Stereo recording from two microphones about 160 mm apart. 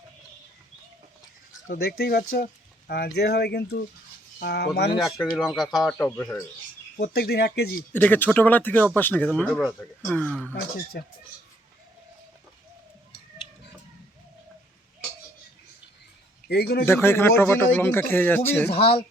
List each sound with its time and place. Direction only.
1.6 s speech: 70° left (ahead or behind)
3.2 s speech: 90° left
5.2 s speech: centre (ahead or behind)
5.7 s speech: 25° left (ahead or behind)
6.0 s speech: 10° left (ahead or behind)
7.0 s speech: 80° left
7.9 s speech: 10° left (ahead or behind)
11.0 s speech: 90° left
16.5 s speech: 90° left
16.8 s speech: 15° left (ahead or behind)